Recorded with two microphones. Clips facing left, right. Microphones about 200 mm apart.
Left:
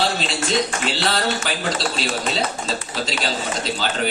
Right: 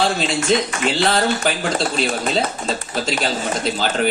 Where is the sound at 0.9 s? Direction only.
50° right (ahead or behind).